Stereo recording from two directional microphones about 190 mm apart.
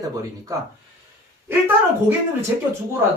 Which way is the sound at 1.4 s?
10° right (ahead or behind).